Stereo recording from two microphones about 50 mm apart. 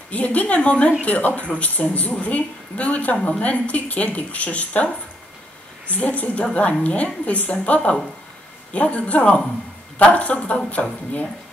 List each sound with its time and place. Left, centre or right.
0.1 s a woman's voice: left